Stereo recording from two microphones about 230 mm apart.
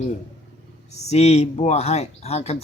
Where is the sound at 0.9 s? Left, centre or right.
Left.